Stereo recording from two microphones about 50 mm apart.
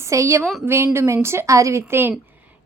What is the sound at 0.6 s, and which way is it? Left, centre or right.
Speech, right.